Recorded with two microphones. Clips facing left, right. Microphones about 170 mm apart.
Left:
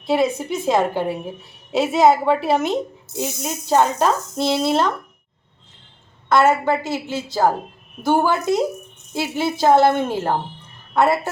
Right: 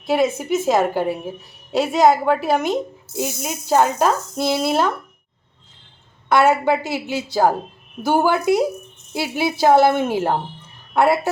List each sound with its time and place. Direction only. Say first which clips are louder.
0.0 s speech: even; centre (ahead or behind)
6.2 s a woman's voice: right 1 dB; 15° right (ahead or behind)